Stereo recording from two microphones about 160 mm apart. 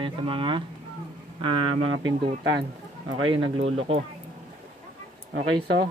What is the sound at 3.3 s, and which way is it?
Speech, 35° right (ahead or behind).